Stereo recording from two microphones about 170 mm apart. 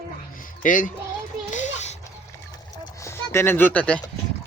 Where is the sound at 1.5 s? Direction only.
45° left (ahead or behind).